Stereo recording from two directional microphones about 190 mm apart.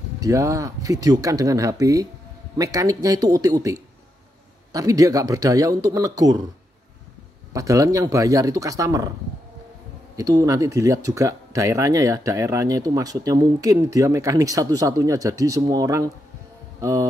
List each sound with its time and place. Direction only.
0.2 s speech: 15° right (ahead or behind)
7.5 s speech: 15° right (ahead or behind)
10.1 s speech: 20° right (ahead or behind)